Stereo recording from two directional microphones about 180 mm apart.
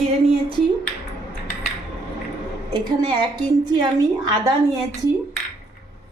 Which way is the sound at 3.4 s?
25° right (ahead or behind).